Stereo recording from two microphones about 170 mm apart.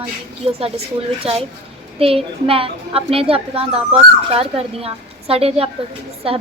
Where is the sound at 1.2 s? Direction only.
35° right (ahead or behind).